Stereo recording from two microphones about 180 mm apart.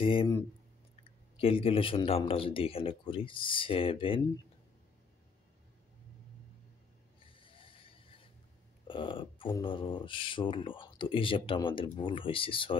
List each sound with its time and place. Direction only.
0.0 s speech: 30° left (ahead or behind)
7.2 s ratchet: 30° left (ahead or behind)
8.8 s speech: 30° left (ahead or behind)